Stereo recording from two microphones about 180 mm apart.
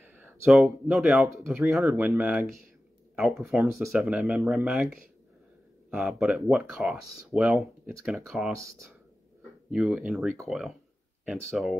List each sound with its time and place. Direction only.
0.1 s speech: 5° right (ahead or behind)
8.5 s speech: 15° right (ahead or behind)
9.7 s speech: 5° right (ahead or behind)